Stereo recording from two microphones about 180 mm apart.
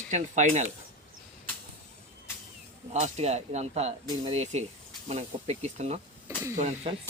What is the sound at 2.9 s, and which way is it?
Speech, 40° right (ahead or behind).